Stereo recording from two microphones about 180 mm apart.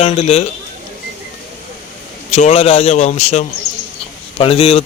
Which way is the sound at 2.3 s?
40° left (ahead or behind).